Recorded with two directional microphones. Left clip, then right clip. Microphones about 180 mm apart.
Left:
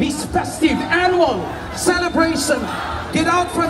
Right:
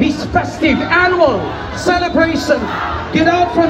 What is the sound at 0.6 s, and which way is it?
Speech, 30° left (ahead or behind).